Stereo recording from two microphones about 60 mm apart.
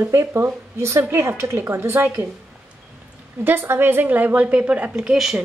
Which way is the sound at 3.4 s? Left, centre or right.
Right.